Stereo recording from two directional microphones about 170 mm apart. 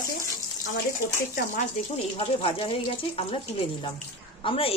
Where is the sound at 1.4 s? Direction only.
45° left (ahead or behind).